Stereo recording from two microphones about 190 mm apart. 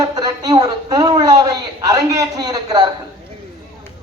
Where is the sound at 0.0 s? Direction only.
20° right (ahead or behind).